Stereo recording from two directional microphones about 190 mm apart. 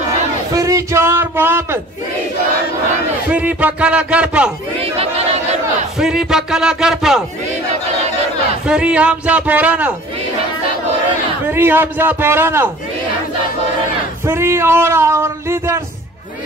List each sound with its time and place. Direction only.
0.5 s speech: 15° right (ahead or behind)
3.3 s speech: 5° right (ahead or behind)
4.7 s battle cry: 30° right (ahead or behind)
5.9 s speech: centre (ahead or behind)
8.6 s speech: 5° right (ahead or behind)
11.4 s speech: 10° right (ahead or behind)
14.2 s a sound: 15° right (ahead or behind)